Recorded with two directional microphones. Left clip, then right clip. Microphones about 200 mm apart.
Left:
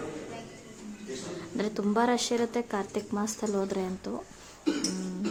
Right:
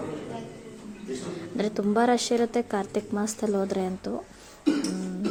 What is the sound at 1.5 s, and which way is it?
A woman's voice, 15° right (ahead or behind).